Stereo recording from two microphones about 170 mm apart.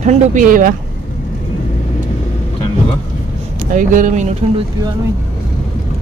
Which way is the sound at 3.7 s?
50° right (ahead or behind).